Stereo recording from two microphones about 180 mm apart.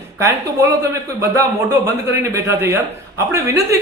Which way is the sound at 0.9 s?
15° right (ahead or behind).